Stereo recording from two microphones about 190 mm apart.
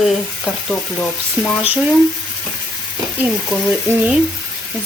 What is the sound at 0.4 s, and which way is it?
Speech, 5° left (ahead or behind).